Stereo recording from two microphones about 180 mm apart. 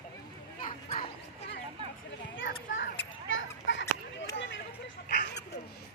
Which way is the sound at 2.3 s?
90° left.